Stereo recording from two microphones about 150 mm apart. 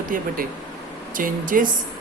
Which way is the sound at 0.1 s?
65° right (ahead or behind).